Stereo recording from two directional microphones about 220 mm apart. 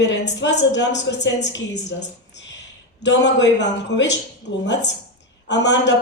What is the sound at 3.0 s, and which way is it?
Speech, 55° left (ahead or behind).